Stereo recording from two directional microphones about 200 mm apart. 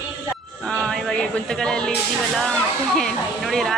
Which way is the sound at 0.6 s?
5° left (ahead or behind).